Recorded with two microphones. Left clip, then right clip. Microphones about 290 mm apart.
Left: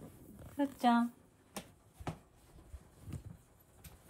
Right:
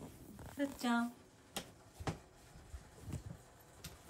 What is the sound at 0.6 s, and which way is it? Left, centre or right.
Speech, centre.